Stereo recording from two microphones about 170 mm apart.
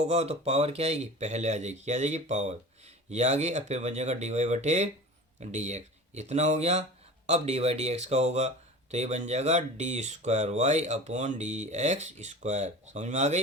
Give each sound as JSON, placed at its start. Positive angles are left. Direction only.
{"t": 0.1, "sound": "speech", "side_deg": -40}